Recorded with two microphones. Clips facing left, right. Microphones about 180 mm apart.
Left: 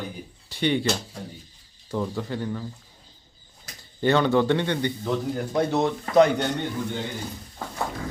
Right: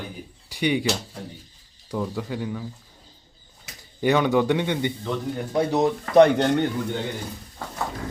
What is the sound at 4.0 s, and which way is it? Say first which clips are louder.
Speech: even; 15° right (ahead or behind).